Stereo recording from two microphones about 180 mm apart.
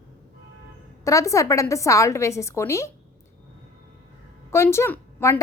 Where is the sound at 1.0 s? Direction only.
15° left (ahead or behind).